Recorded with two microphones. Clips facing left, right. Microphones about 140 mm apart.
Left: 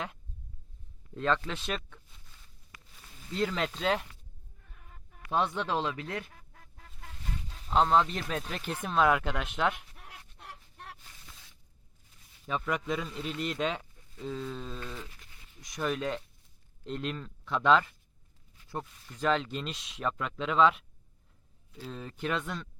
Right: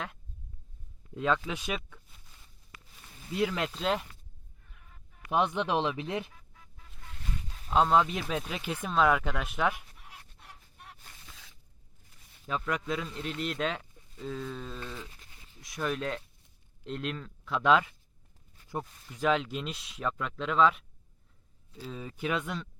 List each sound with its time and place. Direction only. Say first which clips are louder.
1.1 s speech: right 1 dB; 5° right (ahead or behind)
3.3 s speech: right 1 dB; 5° right (ahead or behind)
5.3 s speech: right 2 dB; 15° right (ahead or behind)
7.7 s speech: right 1 dB; 5° right (ahead or behind)
9.7 s a sound: even; 75° left (ahead or behind)
12.5 s speech: even; 5° left (ahead or behind)